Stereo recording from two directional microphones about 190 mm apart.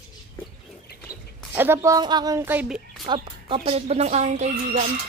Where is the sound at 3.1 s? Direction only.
30° right (ahead or behind).